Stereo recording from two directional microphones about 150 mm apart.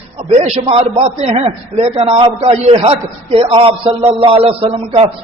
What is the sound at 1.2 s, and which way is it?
A man's voice, 45° right (ahead or behind).